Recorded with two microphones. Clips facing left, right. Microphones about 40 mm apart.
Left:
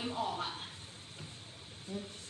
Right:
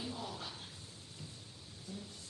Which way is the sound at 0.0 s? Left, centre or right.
Left.